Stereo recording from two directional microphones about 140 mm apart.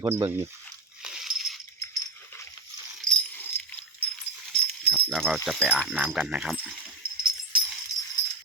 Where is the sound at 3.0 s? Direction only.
10° left (ahead or behind).